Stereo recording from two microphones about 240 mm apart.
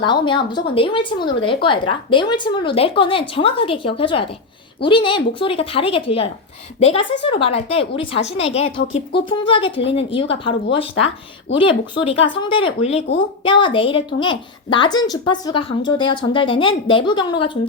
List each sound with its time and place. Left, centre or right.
0.0 s a woman's voice: centre